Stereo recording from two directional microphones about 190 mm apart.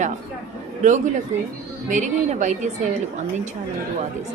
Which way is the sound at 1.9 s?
40° right (ahead or behind).